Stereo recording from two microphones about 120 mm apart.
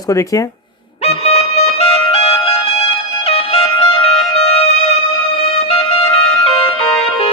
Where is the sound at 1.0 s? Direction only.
60° left (ahead or behind).